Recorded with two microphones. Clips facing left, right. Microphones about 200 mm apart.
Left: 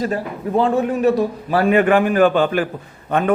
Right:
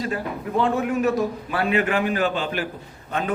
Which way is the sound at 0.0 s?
40° left (ahead or behind).